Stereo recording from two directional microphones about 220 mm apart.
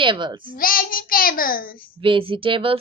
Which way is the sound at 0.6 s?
40° left (ahead or behind).